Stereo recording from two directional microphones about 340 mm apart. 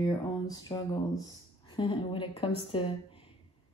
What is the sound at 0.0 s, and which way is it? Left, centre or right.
A woman's voice, centre.